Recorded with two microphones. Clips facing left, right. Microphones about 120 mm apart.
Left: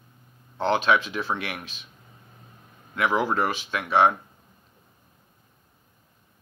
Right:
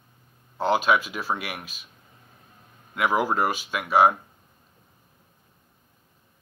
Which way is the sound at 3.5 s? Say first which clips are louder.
Right 1 dB; 10° right (ahead or behind).